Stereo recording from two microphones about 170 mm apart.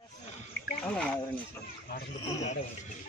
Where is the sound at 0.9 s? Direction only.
5° left (ahead or behind).